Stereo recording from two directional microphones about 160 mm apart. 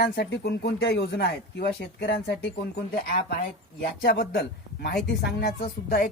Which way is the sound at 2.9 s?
70° left (ahead or behind).